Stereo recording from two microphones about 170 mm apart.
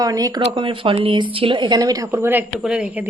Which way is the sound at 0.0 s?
20° right (ahead or behind).